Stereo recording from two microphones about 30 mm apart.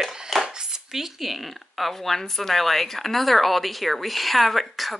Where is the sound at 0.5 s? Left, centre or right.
Right.